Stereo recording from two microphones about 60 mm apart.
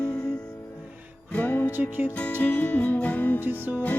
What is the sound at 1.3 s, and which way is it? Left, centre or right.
Music, left.